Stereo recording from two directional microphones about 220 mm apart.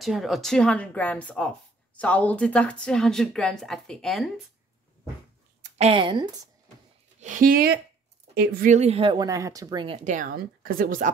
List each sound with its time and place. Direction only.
0.0 s a woman's voice: centre (ahead or behind)
5.8 s speech: 25° right (ahead or behind)
7.2 s speech: 35° right (ahead or behind)
8.7 s speech: 25° right (ahead or behind)
10.0 s speech: 35° right (ahead or behind)